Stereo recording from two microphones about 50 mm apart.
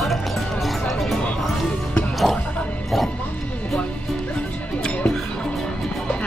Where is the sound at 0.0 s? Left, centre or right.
Centre.